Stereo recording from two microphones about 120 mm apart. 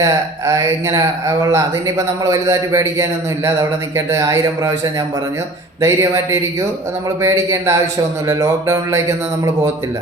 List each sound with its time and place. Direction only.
0.0 s speech: 30° right (ahead or behind)
5.8 s speech: 25° right (ahead or behind)